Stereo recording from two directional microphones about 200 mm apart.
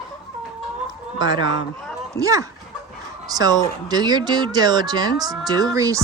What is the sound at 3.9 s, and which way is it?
Speech, 20° right (ahead or behind).